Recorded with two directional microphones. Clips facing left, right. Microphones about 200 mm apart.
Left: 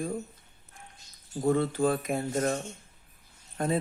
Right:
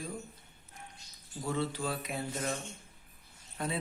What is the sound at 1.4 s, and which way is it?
Speech, 50° left (ahead or behind).